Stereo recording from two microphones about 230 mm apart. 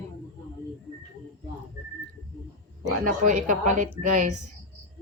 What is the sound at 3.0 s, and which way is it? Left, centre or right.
Speech, right.